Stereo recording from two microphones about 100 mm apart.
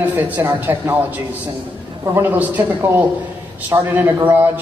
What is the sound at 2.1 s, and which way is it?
A woman's voice, 20° right (ahead or behind).